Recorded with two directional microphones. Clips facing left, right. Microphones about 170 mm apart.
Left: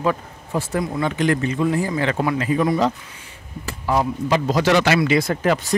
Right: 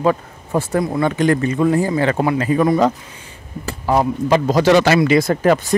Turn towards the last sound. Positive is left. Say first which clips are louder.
# right 5 dB
turn(degrees=-45)  # may be behind; listen again after turning